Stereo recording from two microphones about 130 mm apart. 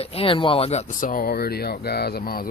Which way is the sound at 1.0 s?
90° left.